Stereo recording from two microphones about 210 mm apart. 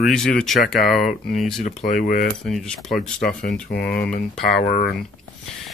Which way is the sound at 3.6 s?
45° left (ahead or behind).